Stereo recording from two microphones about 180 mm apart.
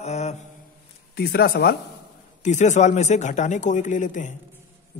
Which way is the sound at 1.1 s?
60° left (ahead or behind).